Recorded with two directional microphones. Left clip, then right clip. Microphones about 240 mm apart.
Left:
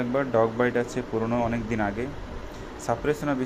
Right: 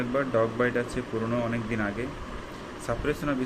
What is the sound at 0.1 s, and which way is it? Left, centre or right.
Speech, centre.